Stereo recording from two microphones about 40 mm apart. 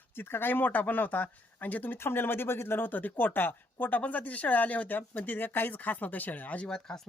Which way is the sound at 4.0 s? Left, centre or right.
Left.